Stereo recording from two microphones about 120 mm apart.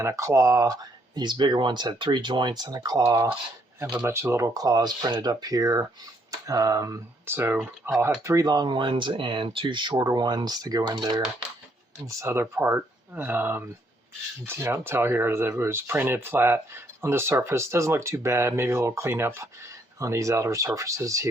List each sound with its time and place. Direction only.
0.0 s speech: 25° right (ahead or behind)
12.0 s speech: 20° right (ahead or behind)